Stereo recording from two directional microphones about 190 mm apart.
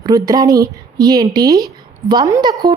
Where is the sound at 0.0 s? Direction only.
20° right (ahead or behind).